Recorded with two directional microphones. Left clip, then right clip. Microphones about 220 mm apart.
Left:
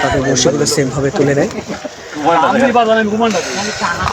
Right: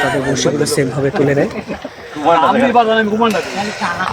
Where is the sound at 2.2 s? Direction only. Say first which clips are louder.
Even; 30° right (ahead or behind).